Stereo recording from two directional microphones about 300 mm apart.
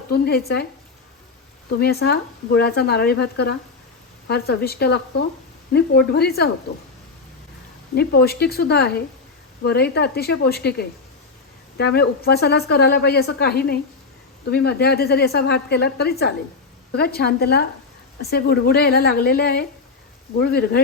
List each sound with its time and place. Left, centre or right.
0.1 s a woman's voice: left
1.8 s a woman's voice: left
7.9 s a woman's voice: left